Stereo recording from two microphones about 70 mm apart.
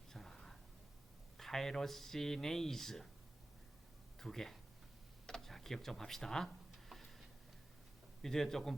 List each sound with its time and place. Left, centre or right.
0.1 s whispering: centre
1.4 s speech: centre
4.2 s speech: centre
5.2 s a sound: centre
8.2 s a man's voice: centre